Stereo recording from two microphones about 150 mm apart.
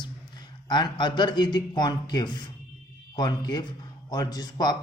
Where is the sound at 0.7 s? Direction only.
30° left (ahead or behind).